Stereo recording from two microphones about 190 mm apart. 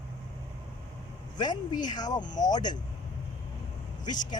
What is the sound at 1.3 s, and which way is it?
Speech, 20° left (ahead or behind).